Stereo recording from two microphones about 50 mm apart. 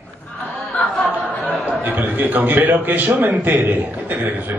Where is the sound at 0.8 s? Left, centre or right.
Left.